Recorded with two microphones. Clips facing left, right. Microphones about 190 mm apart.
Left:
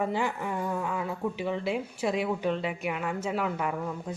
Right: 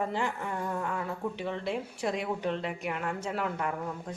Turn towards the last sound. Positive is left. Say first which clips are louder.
# left 2 dB
turn(degrees=5)  # may be behind; listen again after turning